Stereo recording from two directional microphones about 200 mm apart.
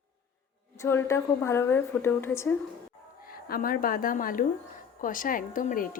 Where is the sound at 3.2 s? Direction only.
45° left (ahead or behind).